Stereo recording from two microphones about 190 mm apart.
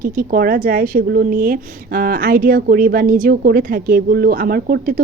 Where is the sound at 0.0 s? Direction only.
50° right (ahead or behind).